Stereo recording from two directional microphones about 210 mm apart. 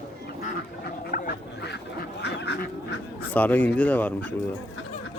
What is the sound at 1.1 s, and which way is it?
Duck, 45° left (ahead or behind).